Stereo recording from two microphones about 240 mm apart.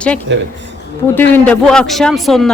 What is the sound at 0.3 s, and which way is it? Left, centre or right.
Speech, right.